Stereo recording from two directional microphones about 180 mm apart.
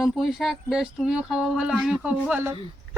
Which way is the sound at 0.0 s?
Centre (ahead or behind).